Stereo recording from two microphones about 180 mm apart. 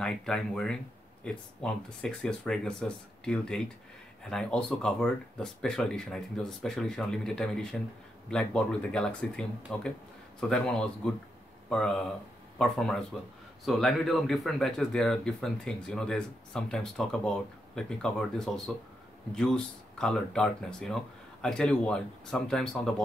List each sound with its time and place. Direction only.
0.0 s speech: 5° left (ahead or behind)